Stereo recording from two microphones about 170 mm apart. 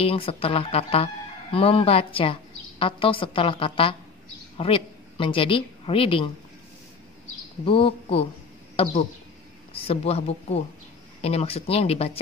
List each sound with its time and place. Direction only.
0.0 s a woman's voice: 35° left (ahead or behind)
7.6 s speech: 30° left (ahead or behind)
9.7 s speech: 35° left (ahead or behind)